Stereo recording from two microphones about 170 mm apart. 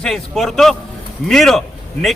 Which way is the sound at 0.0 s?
Centre (ahead or behind).